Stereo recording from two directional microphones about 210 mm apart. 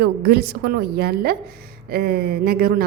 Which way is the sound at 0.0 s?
50° right (ahead or behind).